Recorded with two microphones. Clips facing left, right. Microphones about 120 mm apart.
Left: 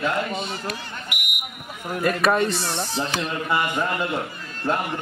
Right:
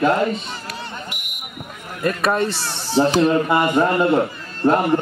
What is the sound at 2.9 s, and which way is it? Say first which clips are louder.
Speech: right 16 dB; 30° right (ahead or behind).